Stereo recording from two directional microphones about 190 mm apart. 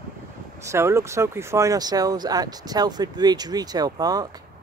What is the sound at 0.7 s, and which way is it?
Speech, 15° right (ahead or behind).